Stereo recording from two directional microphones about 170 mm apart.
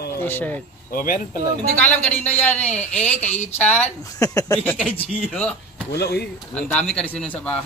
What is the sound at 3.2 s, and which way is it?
Speech, 40° left (ahead or behind).